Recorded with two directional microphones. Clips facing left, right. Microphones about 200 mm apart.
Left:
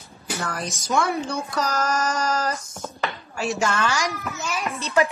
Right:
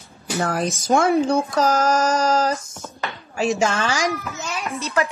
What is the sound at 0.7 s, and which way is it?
Speech, 50° right (ahead or behind).